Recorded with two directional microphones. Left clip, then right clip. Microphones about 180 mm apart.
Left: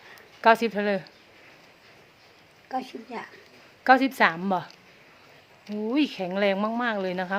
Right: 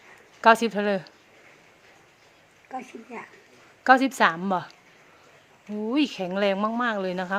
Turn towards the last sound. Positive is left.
turn(degrees=-15)  # may be behind; listen again after turning